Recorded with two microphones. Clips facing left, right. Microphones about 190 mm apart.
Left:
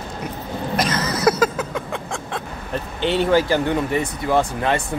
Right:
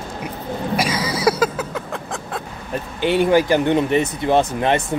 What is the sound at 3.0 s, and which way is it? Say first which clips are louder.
Speech: right 2 dB; 10° right (ahead or behind).